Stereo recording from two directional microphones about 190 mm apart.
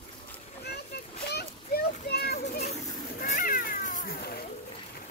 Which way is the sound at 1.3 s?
55° left (ahead or behind).